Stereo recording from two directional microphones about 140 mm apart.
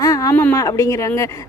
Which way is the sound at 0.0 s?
25° left (ahead or behind).